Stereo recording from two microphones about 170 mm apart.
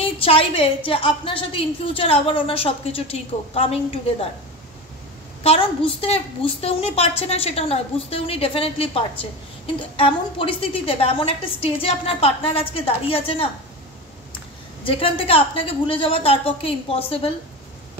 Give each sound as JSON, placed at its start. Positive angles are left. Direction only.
{"t": 0.0, "sound": "a woman's voice", "side_deg": 35}
{"t": 5.4, "sound": "a woman's voice", "side_deg": 35}
{"t": 14.9, "sound": "a woman's voice", "side_deg": 30}